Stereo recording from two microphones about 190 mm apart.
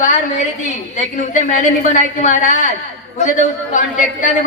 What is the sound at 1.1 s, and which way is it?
A man's voice, 40° left (ahead or behind).